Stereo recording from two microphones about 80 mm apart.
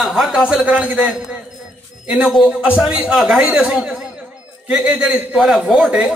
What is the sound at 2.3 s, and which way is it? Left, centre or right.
Speech, centre.